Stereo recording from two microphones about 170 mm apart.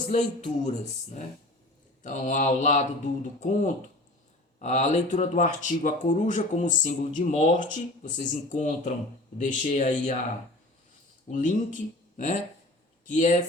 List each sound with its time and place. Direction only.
0.1 s speech: 45° left (ahead or behind)
11.3 s speech: 45° left (ahead or behind)